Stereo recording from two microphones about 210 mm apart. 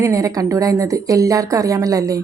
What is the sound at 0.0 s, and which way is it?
A woman's voice, 15° right (ahead or behind).